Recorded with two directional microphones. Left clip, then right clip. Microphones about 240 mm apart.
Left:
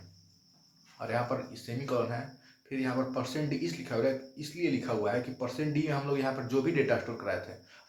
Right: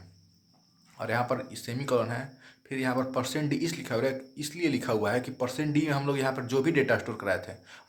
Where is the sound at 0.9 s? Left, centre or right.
Right.